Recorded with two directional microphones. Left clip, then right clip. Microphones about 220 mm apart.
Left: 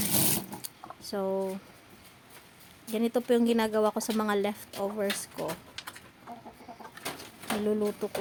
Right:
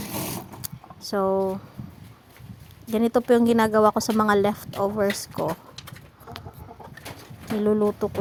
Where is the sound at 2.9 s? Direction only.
25° right (ahead or behind).